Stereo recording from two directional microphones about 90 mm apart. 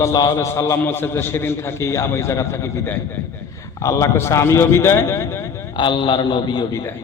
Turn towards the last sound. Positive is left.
turn(degrees=60)  # may be behind; listen again after turning